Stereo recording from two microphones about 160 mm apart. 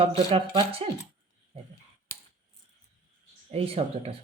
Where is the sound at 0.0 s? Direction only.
40° right (ahead or behind).